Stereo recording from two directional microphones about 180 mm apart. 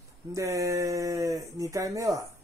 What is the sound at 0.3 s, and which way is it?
Speech, 15° right (ahead or behind).